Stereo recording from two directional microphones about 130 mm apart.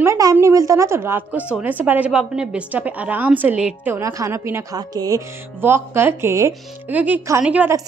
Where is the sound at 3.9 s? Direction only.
25° right (ahead or behind).